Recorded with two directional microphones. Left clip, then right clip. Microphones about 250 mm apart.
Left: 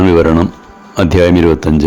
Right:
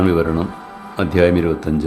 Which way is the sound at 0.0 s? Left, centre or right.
Left.